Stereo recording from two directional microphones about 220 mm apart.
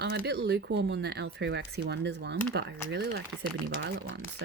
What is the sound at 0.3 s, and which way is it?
Speech, 50° right (ahead or behind).